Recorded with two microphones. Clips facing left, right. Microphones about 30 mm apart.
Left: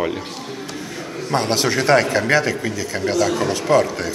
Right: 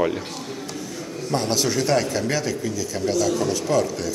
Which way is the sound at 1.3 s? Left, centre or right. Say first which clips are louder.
Left 3 dB; left.